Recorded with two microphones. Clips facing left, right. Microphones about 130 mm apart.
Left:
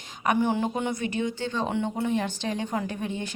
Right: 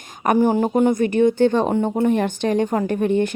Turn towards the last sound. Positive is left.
turn(degrees=-55)  # may be behind; listen again after turning